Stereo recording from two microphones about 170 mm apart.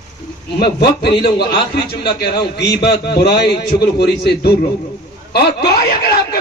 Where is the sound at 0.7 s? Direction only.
70° left (ahead or behind).